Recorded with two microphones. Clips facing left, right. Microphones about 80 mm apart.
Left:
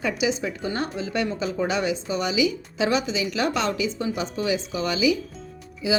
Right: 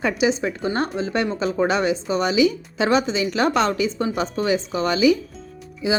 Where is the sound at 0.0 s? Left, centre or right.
Right.